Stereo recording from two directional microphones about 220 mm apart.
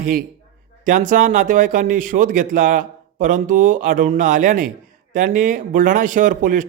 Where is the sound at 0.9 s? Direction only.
35° right (ahead or behind).